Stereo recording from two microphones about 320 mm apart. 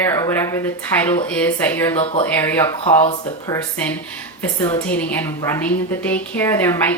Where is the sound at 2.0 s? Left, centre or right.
Centre.